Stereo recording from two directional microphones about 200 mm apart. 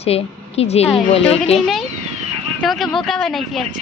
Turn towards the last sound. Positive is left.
turn(degrees=0)  # may be behind; listen again after turning